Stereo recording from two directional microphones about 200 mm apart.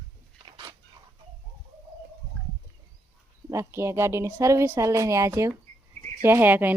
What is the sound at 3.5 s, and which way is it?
Speech, 15° right (ahead or behind).